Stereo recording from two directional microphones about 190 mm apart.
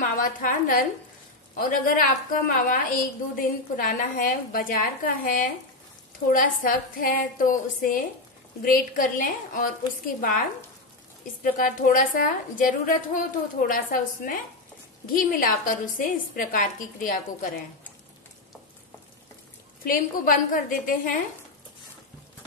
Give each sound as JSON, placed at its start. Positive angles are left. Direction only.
{"t": 0.1, "sound": "a woman's voice", "side_deg": 45}
{"t": 11.4, "sound": "a woman's voice", "side_deg": 45}
{"t": 19.8, "sound": "a woman's voice", "side_deg": 45}